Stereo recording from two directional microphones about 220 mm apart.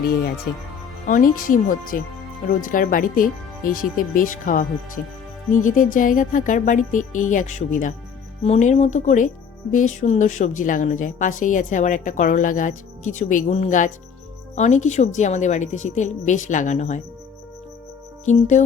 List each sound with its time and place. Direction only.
1.0 s a woman's voice: 35° left (ahead or behind)
18.3 s a woman's voice: 35° left (ahead or behind)